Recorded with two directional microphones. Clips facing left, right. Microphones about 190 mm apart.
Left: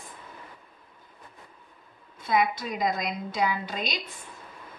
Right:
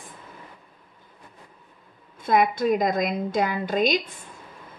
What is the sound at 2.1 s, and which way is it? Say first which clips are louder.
A woman's voice: right 4 dB; 50° right (ahead or behind).